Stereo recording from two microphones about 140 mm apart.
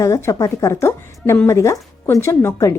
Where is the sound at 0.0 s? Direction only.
20° left (ahead or behind).